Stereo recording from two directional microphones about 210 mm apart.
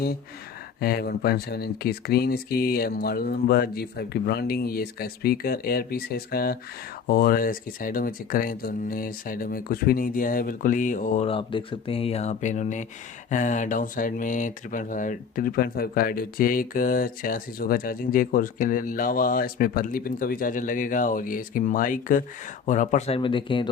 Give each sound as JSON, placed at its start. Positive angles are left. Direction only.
{"t": 0.8, "sound": "speech", "side_deg": 45}